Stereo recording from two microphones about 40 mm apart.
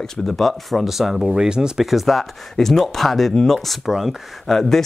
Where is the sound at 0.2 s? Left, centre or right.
Centre.